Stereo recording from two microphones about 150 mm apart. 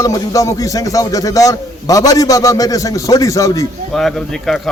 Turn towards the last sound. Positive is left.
turn(degrees=5)  # may be behind; listen again after turning